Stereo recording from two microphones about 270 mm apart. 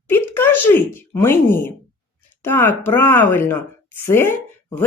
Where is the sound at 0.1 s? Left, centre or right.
Centre.